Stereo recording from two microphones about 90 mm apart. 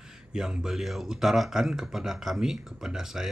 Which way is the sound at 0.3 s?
10° right (ahead or behind).